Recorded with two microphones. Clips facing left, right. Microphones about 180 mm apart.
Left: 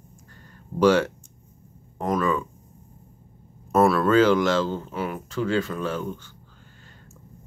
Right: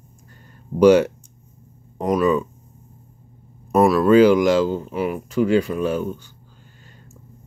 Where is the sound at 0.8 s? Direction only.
20° right (ahead or behind).